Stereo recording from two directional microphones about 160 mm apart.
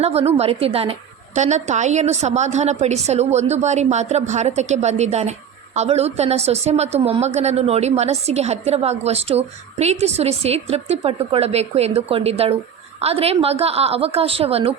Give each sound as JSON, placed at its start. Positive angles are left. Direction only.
{"t": 0.0, "sound": "a woman's voice", "side_deg": -40}